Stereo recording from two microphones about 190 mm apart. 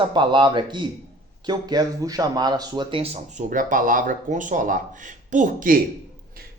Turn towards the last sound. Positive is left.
turn(degrees=-50)  # may be behind; listen again after turning